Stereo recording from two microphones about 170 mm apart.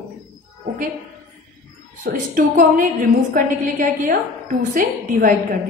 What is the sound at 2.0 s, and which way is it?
A woman's voice, 50° right (ahead or behind).